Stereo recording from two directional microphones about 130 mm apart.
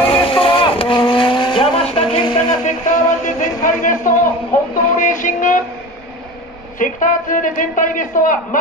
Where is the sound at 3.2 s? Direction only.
90° left.